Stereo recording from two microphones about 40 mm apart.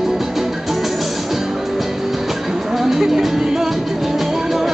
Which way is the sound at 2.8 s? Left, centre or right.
Centre.